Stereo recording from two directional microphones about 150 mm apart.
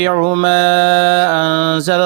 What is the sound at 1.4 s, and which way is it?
Mantra, 35° right (ahead or behind).